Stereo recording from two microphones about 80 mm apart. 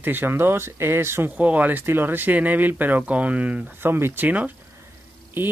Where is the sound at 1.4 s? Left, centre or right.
Centre.